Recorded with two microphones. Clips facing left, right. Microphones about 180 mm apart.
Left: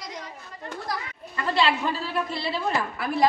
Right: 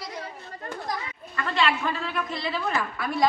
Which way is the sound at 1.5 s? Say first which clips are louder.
Left 1 dB; 35° left (ahead or behind).